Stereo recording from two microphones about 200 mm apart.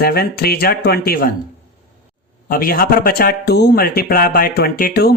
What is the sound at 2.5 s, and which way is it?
A man's voice, 45° left (ahead or behind).